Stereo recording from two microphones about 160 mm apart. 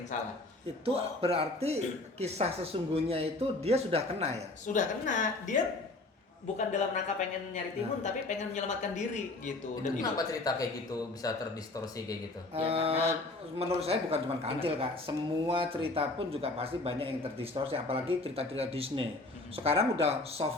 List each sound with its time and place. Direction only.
0.9 s a woman's voice: 35° right (ahead or behind)
4.6 s speech: 50° left (ahead or behind)
6.6 s speech: 50° left (ahead or behind)
10.0 s speech: 25° left (ahead or behind)
12.5 s a woman's voice: 35° right (ahead or behind)